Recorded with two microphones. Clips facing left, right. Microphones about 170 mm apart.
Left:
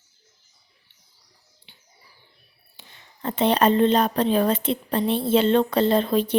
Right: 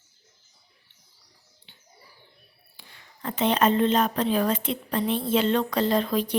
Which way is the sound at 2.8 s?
25° left (ahead or behind).